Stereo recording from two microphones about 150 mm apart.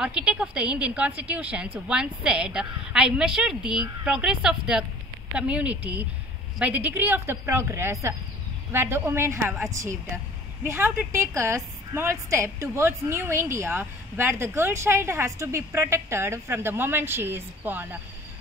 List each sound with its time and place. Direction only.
0.0 s a woman's voice: 5° right (ahead or behind)